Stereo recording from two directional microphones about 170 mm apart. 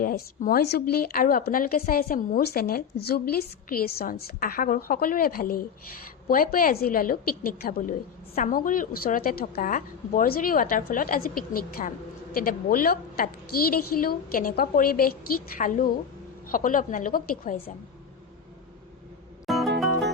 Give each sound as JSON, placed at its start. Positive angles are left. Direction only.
{"t": 0.0, "sound": "a woman's voice", "side_deg": 60}
{"t": 19.5, "sound": "music", "side_deg": 0}